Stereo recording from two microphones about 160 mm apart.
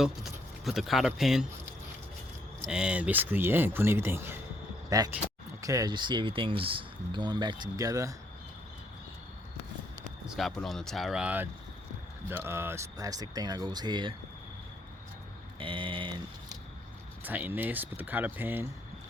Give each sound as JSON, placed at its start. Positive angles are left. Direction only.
{"t": 0.0, "sound": "speech", "side_deg": 0}
{"t": 2.6, "sound": "speech", "side_deg": -5}
{"t": 10.2, "sound": "speech", "side_deg": 0}
{"t": 15.5, "sound": "a sound", "side_deg": -30}
{"t": 17.2, "sound": "speech", "side_deg": -10}